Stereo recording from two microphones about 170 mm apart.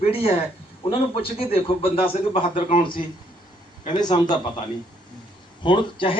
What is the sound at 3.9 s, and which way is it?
Speech, 25° left (ahead or behind).